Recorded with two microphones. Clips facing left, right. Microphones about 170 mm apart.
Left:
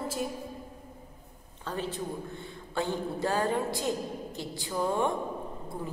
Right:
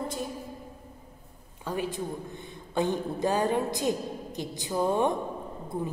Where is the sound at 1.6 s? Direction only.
10° right (ahead or behind).